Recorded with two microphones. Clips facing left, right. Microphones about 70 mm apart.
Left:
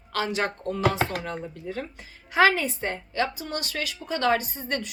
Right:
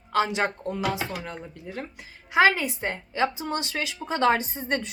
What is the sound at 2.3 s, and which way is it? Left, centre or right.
Speech, centre.